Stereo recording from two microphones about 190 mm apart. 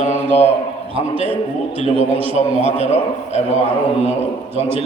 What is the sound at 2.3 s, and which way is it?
A man's voice, 35° left (ahead or behind).